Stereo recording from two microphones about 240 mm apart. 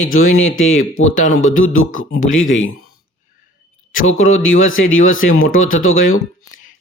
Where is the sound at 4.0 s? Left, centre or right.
Left.